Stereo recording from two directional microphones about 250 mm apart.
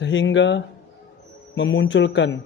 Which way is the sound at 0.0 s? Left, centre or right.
Left.